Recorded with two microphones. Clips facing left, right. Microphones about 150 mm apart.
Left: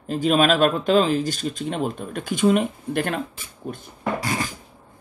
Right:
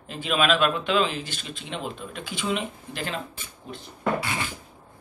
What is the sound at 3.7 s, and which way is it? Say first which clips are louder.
Wood: even; 45° left (ahead or behind).